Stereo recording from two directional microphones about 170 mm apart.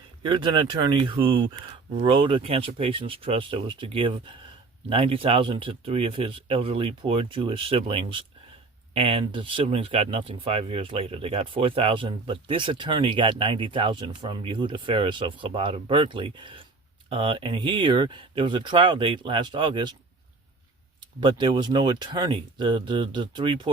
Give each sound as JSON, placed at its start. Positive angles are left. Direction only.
{"t": 0.2, "sound": "speech", "side_deg": -30}
{"t": 21.2, "sound": "speech", "side_deg": -25}